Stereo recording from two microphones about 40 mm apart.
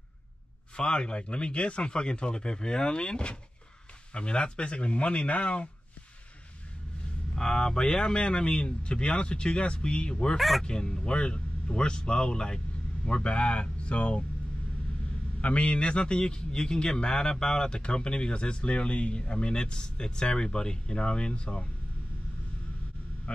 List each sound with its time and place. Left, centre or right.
0.7 s a man's voice: left
7.3 s a man's voice: centre
10.3 s speech: centre
10.6 s speech: centre
15.4 s a man's voice: left